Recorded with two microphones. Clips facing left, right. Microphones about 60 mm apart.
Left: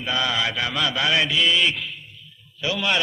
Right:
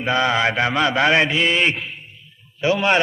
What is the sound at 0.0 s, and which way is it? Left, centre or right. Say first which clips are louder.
Mantra: right 6 dB; right.